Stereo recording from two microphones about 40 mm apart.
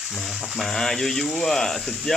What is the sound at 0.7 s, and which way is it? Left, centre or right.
Speech, centre.